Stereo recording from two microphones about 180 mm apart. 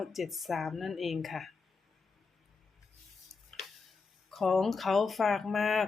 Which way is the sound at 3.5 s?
Centre (ahead or behind).